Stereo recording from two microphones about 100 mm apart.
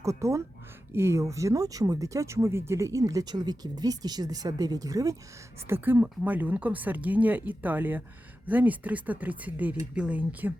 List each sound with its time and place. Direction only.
0.0 s speech: 30° right (ahead or behind)
5.6 s speech: 20° right (ahead or behind)